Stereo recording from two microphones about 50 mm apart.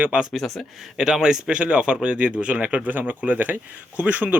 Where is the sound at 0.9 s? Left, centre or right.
Centre; by 4.4 s right.